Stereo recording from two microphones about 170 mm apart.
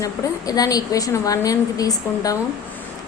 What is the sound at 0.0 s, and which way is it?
A woman's voice, 20° left (ahead or behind).